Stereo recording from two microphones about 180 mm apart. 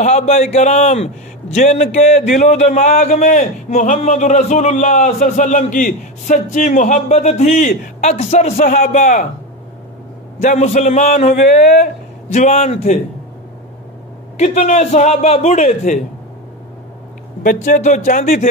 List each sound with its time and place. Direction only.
0.0 s a man's voice: 40° left (ahead or behind)
10.4 s a man's voice: 40° left (ahead or behind)
14.3 s a man's voice: 40° left (ahead or behind)
17.4 s a man's voice: 45° left (ahead or behind)